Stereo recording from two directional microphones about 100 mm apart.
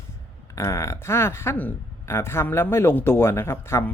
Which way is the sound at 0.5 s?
30° left (ahead or behind).